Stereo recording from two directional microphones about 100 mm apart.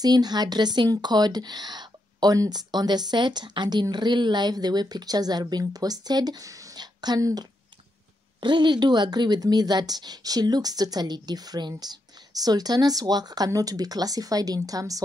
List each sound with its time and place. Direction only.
0.0 s speech: 40° right (ahead or behind)
8.4 s speech: 50° right (ahead or behind)